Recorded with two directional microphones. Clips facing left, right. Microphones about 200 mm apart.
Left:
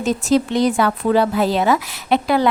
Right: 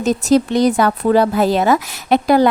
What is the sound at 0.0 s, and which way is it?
Speech, 40° right (ahead or behind).